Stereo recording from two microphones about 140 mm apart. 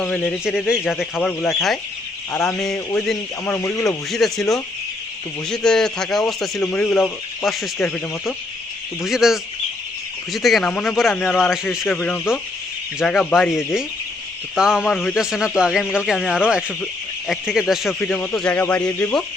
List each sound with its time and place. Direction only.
0.0 s speech: 10° left (ahead or behind)
0.7 s speech: 5° right (ahead or behind)
1.2 s speech: 5° left (ahead or behind)
4.1 s speech: centre (ahead or behind)
9.0 s speech: centre (ahead or behind)
11.9 s speech: 5° left (ahead or behind)
18.0 s speech: 10° left (ahead or behind)